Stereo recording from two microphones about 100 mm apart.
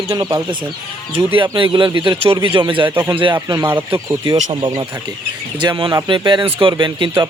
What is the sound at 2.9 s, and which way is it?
Speech, 20° right (ahead or behind).